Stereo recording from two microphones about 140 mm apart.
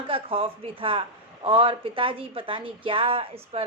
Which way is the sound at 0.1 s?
40° right (ahead or behind).